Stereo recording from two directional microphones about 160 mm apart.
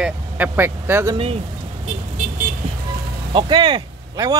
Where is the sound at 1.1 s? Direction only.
35° right (ahead or behind).